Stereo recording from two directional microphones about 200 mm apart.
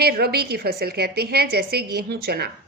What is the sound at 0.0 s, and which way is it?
Speech, 50° right (ahead or behind).